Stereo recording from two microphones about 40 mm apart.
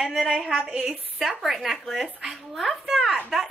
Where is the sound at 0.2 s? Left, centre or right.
Right.